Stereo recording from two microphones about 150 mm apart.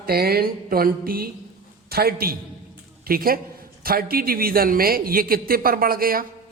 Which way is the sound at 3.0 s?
80° right.